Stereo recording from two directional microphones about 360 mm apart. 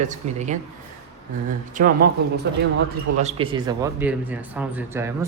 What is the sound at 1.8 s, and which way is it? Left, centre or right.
Speech, right.